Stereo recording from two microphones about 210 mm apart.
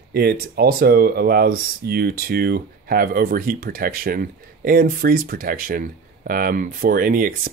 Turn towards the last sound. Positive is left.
turn(degrees=-40)  # may be behind; listen again after turning